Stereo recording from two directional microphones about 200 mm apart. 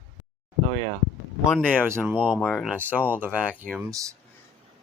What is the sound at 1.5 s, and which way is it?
Speech, centre (ahead or behind).